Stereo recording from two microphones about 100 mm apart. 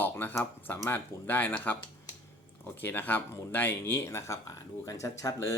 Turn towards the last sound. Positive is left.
turn(degrees=35)  # may be behind; listen again after turning